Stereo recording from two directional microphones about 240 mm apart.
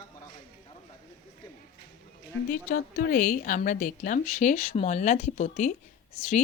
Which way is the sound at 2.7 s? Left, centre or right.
Left.